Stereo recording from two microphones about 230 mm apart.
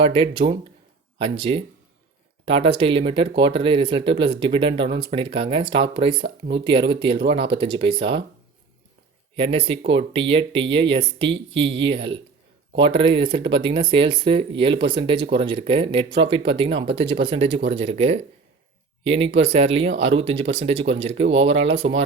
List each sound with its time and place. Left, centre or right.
0.0 s speech: right
9.3 s speech: right